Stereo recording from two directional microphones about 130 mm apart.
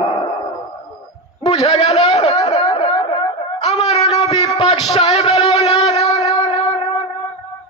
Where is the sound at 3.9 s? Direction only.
50° left (ahead or behind).